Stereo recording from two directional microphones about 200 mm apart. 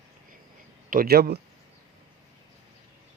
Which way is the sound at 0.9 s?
50° right (ahead or behind).